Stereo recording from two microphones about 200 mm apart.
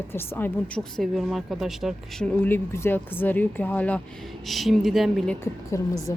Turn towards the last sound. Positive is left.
turn(degrees=15)  # may be behind; listen again after turning